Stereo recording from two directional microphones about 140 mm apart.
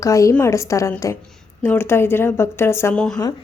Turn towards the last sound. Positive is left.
turn(degrees=5)  # may be behind; listen again after turning